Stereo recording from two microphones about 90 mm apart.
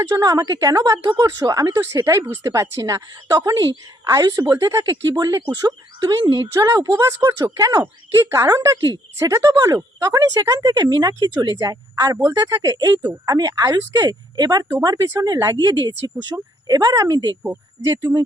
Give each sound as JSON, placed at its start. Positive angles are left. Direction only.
{"t": 0.1, "sound": "speech", "side_deg": -40}
{"t": 4.5, "sound": "speech", "side_deg": -35}
{"t": 4.9, "sound": "speech", "side_deg": -45}